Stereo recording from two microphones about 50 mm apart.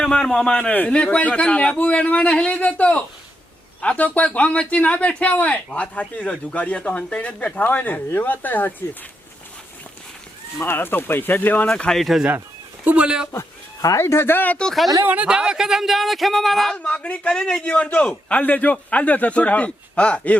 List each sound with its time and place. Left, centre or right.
0.0 s a man's voice: centre
0.7 s speech: left
0.9 s a man's voice: left
10.6 s speech: left
11.9 s speech: centre
12.8 s speech: right
13.9 s speech: left
15.0 s speech: right
15.3 s speech: centre
16.8 s a man's voice: left